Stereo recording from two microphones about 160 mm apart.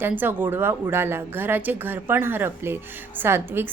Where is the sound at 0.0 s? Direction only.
10° right (ahead or behind).